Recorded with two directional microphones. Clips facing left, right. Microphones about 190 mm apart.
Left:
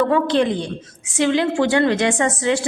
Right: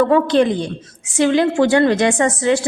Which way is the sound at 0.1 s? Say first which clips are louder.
Right 3 dB; 45° right (ahead or behind).